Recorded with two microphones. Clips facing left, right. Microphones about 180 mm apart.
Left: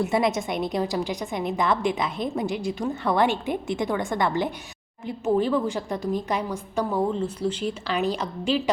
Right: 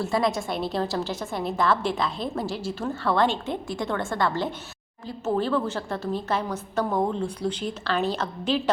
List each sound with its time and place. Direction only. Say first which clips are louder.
0.0 s a woman's voice: left 2 dB; 20° left (ahead or behind)